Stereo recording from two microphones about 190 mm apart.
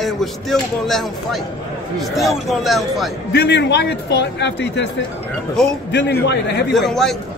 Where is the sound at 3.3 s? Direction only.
60° left (ahead or behind).